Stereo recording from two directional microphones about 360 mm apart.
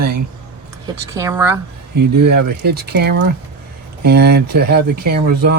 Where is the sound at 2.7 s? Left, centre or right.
Right.